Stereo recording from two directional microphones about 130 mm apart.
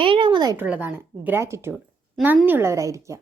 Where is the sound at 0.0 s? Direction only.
40° right (ahead or behind).